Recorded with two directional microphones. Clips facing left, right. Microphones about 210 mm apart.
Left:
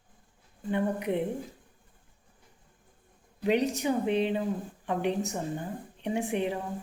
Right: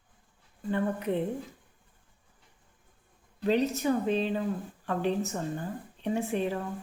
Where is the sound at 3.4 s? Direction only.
15° left (ahead or behind).